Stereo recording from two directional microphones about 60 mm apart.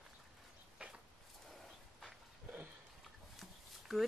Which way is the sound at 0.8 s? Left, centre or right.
Centre.